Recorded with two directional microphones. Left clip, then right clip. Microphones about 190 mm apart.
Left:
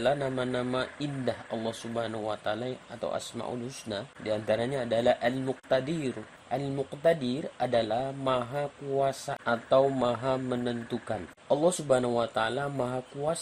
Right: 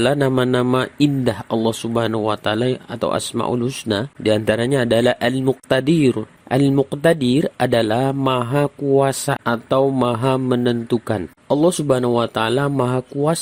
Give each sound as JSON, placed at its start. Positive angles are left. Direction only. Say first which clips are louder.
{"t": 0.0, "sound": "speech", "louder": "right 11 dB", "side_deg": -40}